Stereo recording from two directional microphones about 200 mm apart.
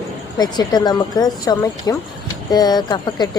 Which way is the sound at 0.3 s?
20° left (ahead or behind).